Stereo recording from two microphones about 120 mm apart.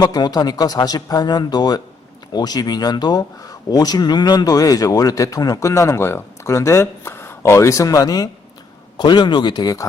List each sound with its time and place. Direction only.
0.0 s speech: 35° left (ahead or behind)